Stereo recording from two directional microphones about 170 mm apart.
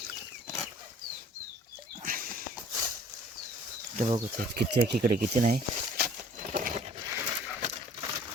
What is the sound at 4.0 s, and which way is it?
Speech, 50° right (ahead or behind).